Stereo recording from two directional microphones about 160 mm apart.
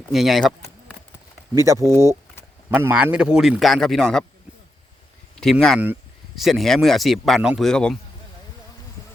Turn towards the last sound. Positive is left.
turn(degrees=5)  # may be behind; listen again after turning